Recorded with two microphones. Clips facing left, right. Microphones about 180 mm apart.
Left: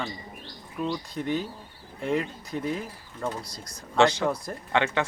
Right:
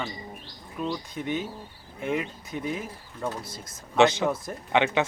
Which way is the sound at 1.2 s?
5° right (ahead or behind).